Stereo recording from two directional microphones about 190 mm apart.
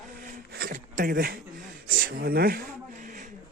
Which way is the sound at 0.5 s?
50° right (ahead or behind).